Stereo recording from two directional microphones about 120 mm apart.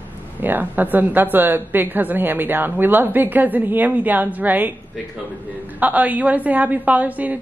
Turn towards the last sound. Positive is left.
turn(degrees=-15)  # may be behind; listen again after turning